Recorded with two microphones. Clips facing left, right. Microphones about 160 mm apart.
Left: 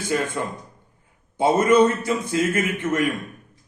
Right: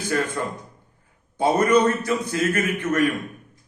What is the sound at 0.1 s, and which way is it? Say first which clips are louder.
Speech: even; 20° left (ahead or behind).